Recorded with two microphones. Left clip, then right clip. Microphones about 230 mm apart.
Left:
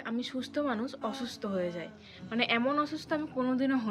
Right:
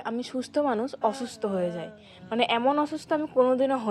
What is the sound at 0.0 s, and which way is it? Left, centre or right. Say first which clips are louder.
A woman's voice: right 5 dB; right.